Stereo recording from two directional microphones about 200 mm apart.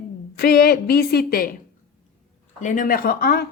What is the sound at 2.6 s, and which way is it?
Speech, 40° left (ahead or behind).